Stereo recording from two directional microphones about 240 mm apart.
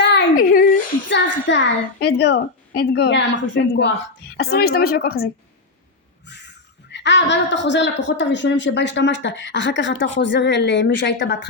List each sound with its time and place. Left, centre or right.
0.0 s a sound: left
3.5 s a woman's voice: left
6.9 s speech: left